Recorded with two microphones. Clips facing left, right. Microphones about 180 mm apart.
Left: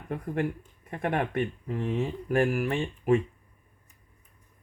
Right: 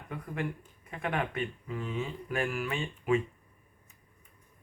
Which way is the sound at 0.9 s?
40° left (ahead or behind).